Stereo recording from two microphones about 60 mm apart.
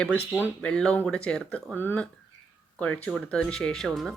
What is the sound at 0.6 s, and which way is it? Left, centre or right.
Speech, centre.